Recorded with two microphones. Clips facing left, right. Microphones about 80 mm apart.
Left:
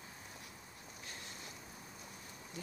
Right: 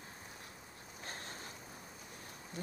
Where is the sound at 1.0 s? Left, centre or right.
Right.